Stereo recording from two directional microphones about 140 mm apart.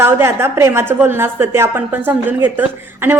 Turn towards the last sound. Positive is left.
turn(degrees=-15)  # may be behind; listen again after turning